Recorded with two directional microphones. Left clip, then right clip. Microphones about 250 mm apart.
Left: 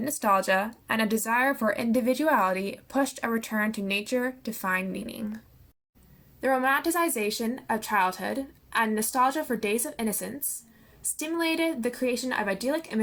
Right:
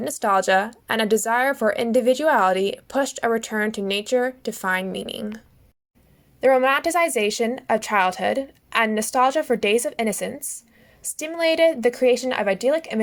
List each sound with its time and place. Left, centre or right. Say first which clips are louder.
0.0 s speech: right 4 dB; right
6.4 s a woman's voice: right 7 dB; right